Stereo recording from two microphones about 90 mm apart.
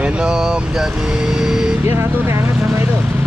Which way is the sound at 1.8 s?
25° right (ahead or behind).